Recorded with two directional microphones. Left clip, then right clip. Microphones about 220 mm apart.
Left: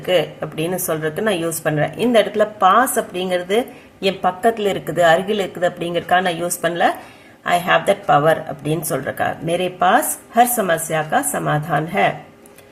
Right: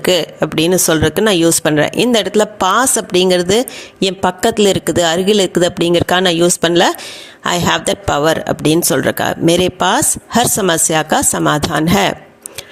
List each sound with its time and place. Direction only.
0.0 s speech: 45° right (ahead or behind)